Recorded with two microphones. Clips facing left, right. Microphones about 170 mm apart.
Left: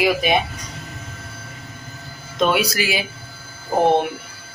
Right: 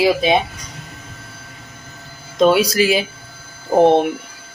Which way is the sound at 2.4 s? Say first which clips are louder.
Right 6 dB; 35° right (ahead or behind).